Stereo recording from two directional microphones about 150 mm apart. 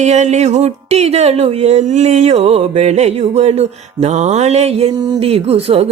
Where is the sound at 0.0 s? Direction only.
50° right (ahead or behind).